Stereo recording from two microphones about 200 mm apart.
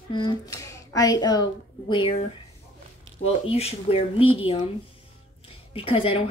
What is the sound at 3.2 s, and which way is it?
A woman's voice, 30° left (ahead or behind).